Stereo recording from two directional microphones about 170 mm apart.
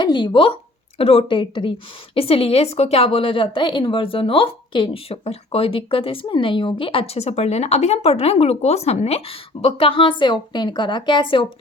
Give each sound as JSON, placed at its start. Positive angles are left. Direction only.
{"t": 0.0, "sound": "a woman's voice", "side_deg": 25}